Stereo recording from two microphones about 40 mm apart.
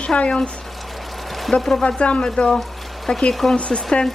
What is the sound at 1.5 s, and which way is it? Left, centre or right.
Speech, centre.